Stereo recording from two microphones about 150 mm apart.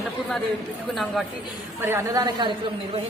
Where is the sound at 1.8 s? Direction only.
15° right (ahead or behind).